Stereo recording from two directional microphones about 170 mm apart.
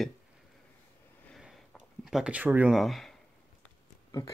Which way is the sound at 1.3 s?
Centre (ahead or behind).